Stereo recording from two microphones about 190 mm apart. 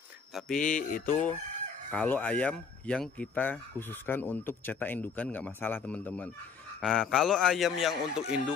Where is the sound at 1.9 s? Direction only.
10° left (ahead or behind).